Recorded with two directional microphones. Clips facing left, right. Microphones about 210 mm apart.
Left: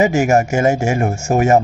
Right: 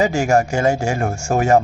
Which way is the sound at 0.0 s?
20° left (ahead or behind).